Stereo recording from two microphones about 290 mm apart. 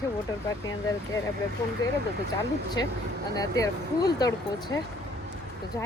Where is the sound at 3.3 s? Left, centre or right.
Centre.